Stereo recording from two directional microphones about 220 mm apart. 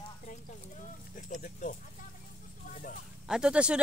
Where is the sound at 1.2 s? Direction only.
35° left (ahead or behind).